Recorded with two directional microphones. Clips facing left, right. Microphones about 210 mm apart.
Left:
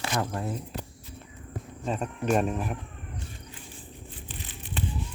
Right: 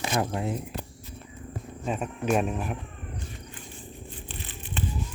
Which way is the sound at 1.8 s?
5° right (ahead or behind).